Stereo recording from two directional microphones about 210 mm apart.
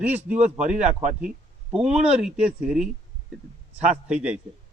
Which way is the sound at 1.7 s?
5° right (ahead or behind).